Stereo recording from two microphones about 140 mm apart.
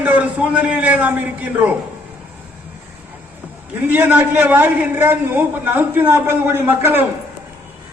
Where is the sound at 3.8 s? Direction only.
10° right (ahead or behind).